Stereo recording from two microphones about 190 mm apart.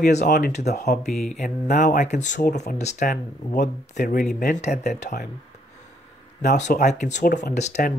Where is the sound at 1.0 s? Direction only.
Centre (ahead or behind).